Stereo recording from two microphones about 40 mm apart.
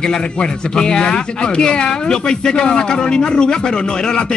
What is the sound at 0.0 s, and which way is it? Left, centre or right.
Speech, left.